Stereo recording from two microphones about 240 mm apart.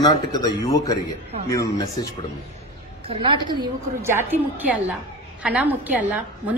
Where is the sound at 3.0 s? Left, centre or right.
Right; by 6.5 s centre.